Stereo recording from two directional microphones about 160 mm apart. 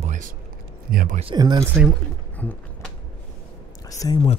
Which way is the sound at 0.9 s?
55° right (ahead or behind).